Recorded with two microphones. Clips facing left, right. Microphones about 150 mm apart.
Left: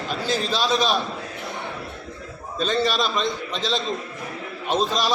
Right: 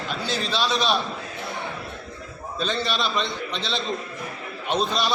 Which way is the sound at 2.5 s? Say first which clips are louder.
Left 4 dB; 40° left (ahead or behind).